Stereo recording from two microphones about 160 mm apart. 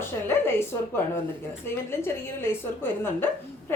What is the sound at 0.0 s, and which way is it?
A woman's voice, 15° left (ahead or behind).